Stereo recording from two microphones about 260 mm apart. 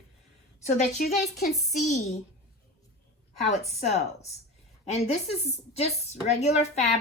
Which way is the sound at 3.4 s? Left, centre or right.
Left.